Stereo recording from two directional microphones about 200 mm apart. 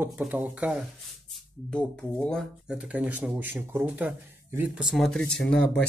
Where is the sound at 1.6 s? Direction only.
5° left (ahead or behind).